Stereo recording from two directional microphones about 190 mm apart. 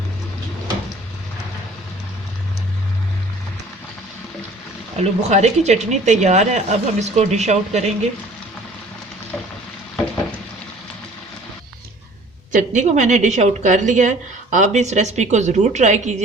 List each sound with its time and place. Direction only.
4.9 s speech: 35° right (ahead or behind)
12.5 s speech: 40° right (ahead or behind)